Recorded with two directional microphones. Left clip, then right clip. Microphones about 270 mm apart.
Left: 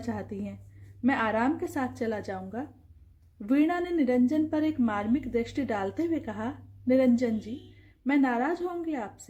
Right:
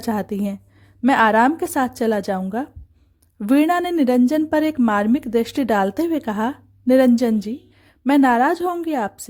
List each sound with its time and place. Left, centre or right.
0.0 s a woman's voice: right